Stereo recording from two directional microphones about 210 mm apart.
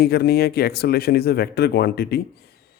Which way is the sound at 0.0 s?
50° left (ahead or behind).